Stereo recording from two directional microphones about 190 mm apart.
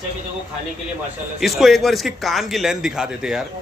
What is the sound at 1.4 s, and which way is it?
A man's voice, centre (ahead or behind).